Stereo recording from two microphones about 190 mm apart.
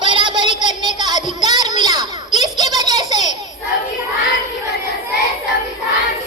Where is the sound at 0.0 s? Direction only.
25° right (ahead or behind).